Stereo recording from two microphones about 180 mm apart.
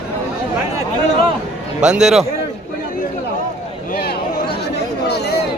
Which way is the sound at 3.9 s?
60° left (ahead or behind).